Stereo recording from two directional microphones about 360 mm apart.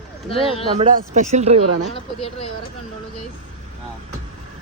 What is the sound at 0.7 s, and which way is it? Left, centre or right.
Speech, right.